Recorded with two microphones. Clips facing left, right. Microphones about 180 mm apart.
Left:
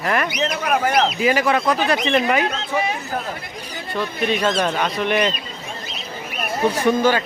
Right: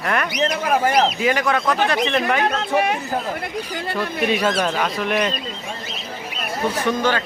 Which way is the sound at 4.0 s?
5° right (ahead or behind).